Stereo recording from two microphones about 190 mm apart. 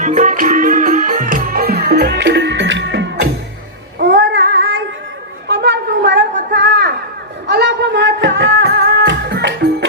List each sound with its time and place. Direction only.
0.0 s music: 40° right (ahead or behind); by 4.8 s 65° right (ahead or behind)
5.5 s a sound: 65° right (ahead or behind)
7.4 s music: 65° right (ahead or behind)